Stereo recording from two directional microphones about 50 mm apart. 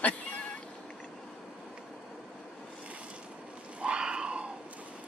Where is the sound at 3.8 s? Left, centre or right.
Centre.